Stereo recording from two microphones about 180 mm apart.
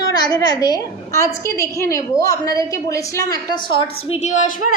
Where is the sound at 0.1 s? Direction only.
20° left (ahead or behind).